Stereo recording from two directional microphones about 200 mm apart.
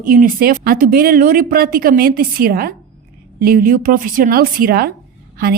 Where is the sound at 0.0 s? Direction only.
45° right (ahead or behind).